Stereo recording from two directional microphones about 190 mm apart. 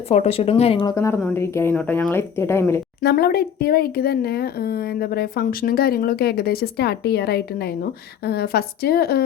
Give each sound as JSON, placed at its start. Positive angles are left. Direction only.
{"t": 0.1, "sound": "a woman's voice", "side_deg": 35}
{"t": 3.0, "sound": "speech", "side_deg": 55}